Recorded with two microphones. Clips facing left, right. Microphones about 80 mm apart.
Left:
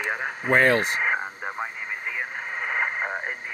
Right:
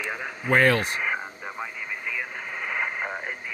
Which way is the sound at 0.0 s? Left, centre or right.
Left.